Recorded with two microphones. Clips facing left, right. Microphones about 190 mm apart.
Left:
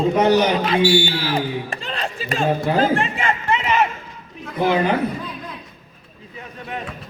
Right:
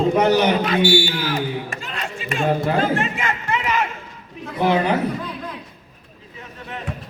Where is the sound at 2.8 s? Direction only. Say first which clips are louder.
Left 2 dB; 30° left (ahead or behind).